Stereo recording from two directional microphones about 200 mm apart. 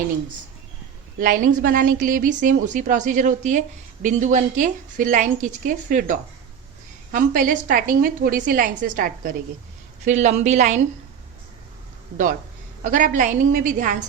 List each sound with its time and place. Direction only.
1.2 s a woman's voice: 40° right (ahead or behind)
12.1 s speech: 40° right (ahead or behind)